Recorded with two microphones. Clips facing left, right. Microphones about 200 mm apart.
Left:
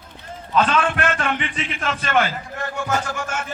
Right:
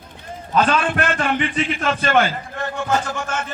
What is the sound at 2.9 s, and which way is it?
Speech, 10° left (ahead or behind).